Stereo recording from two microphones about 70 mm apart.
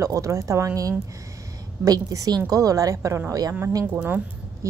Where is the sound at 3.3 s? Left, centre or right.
Right.